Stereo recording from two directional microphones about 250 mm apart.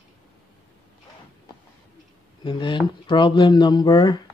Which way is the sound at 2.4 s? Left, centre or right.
Centre.